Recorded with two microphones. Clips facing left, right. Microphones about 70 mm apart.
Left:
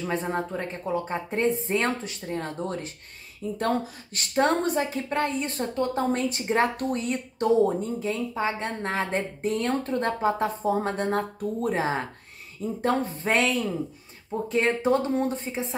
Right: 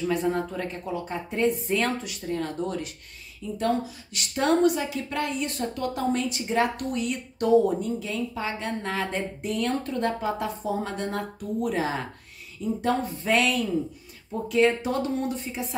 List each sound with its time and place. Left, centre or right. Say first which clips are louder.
0.0 s a woman's voice: right 2 dB; left
3.5 s a woman's voice: right 1 dB; left